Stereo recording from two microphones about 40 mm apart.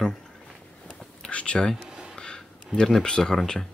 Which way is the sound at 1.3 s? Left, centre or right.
Left.